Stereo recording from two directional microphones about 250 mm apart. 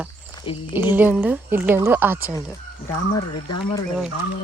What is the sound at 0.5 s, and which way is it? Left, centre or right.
Speech, centre.